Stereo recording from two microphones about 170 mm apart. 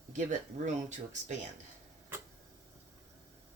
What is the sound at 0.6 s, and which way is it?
Speech, 40° right (ahead or behind).